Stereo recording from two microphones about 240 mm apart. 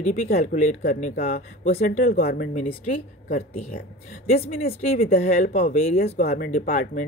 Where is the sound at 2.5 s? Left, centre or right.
Left.